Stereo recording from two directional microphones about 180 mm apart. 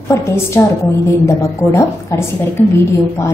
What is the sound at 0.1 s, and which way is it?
A woman's voice, 15° left (ahead or behind).